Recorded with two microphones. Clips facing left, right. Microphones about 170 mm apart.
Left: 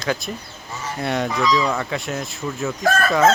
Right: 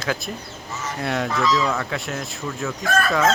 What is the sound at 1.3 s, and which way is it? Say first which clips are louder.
Speech: left 1 dB; 15° left (ahead or behind).